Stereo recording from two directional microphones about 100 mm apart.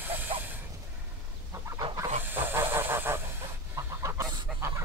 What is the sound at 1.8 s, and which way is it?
Chicken, 65° right (ahead or behind).